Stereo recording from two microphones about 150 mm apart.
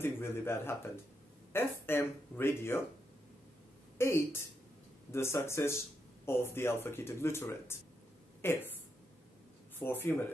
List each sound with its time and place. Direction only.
0.0 s speech: 15° left (ahead or behind)
4.0 s speech: 15° left (ahead or behind)
9.8 s speech: 15° left (ahead or behind)